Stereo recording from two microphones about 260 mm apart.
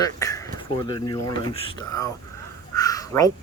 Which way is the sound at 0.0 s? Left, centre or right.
Centre.